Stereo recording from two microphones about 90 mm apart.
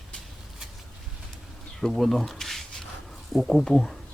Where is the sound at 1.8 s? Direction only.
Centre (ahead or behind).